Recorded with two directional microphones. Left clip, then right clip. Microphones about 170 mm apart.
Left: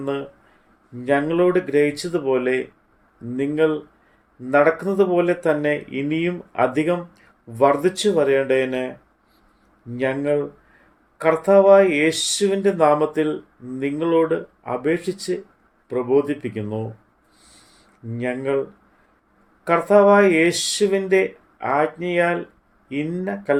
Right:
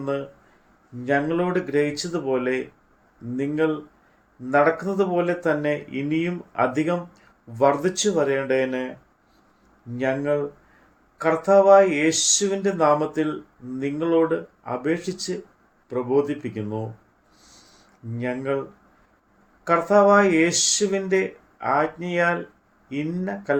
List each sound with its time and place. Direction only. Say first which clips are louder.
0.0 s speech: left 1 dB; 50° left (ahead or behind)
9.9 s speech: left 2 dB; 50° left (ahead or behind)
17.4 s a sound: even; 50° left (ahead or behind)
18.2 s speech: left 3 dB; 50° left (ahead or behind)
19.6 s speech: left 3 dB; 50° left (ahead or behind)